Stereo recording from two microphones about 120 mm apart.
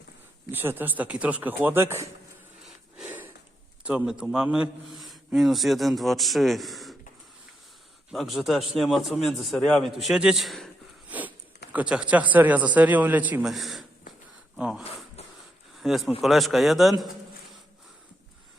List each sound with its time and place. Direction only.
0.5 s speech: 15° right (ahead or behind)
3.8 s a man's voice: 5° right (ahead or behind)
8.1 s a man's voice: centre (ahead or behind)
11.1 s speech: 15° right (ahead or behind)
13.4 s a man's voice: centre (ahead or behind)
15.2 s wheeze: 60° left (ahead or behind)
15.8 s a man's voice: centre (ahead or behind)